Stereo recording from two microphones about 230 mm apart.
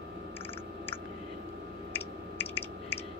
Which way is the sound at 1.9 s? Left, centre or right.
Centre.